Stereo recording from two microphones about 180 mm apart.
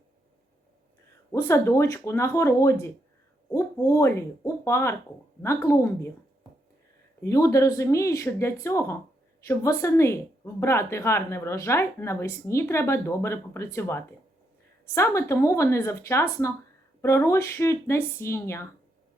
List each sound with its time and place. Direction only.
1.3 s a woman's voice: 15° left (ahead or behind)
7.2 s a woman's voice: 15° left (ahead or behind)